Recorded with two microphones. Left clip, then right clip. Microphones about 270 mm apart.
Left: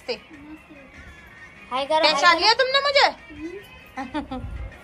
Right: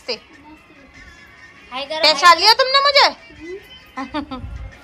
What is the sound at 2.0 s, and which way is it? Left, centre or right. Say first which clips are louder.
A woman's voice: right 7 dB; centre.